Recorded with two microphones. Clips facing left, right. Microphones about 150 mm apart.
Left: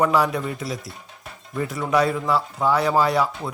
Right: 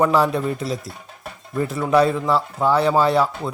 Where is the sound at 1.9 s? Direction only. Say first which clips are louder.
Right 3 dB; 30° right (ahead or behind).